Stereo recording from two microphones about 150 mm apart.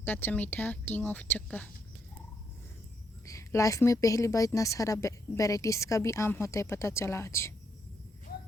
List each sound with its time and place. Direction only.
0.0 s speech: 10° left (ahead or behind)
3.2 s a woman's voice: 20° left (ahead or behind)
8.3 s a sound: 90° left